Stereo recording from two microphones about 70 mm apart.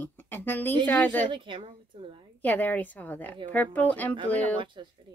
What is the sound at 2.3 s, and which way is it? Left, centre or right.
Speech, left.